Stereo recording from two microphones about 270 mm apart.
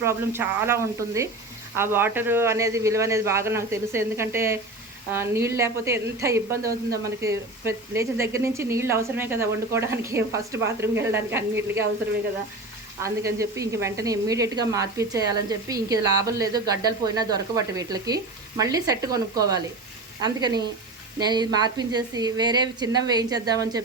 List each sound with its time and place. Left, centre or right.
0.0 s a woman's voice: centre
13.0 s a woman's voice: centre